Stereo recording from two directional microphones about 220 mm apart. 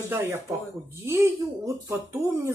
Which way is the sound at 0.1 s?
10° right (ahead or behind).